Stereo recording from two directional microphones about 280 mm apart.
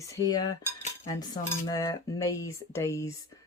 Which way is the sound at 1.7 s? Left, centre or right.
Centre.